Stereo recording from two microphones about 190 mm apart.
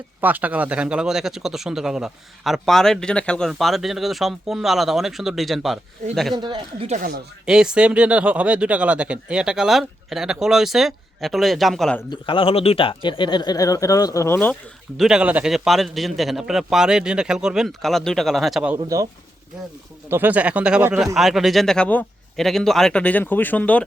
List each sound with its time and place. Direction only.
0.2 s speech: 10° right (ahead or behind)
6.3 s speech: 25° right (ahead or behind)
7.4 s speech: 5° right (ahead or behind)
12.1 s speech: 25° left (ahead or behind)
14.9 s speech: centre (ahead or behind)
18.8 s speech: 20° right (ahead or behind)
20.1 s speech: 10° right (ahead or behind); by 23.8 s 10° left (ahead or behind)